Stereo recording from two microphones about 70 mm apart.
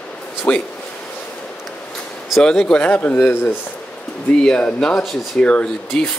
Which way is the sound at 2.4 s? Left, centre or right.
Centre.